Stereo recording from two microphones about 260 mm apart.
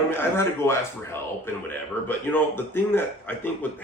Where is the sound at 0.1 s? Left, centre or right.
Centre.